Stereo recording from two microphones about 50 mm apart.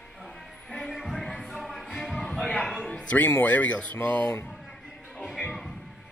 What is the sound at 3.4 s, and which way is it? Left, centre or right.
Speech, left.